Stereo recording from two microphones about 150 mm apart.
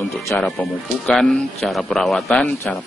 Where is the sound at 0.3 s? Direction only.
Centre (ahead or behind).